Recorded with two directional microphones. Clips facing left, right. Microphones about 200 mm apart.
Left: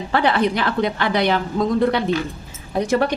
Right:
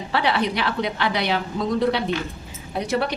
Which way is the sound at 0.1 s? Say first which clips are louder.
Left 4 dB; 50° left (ahead or behind).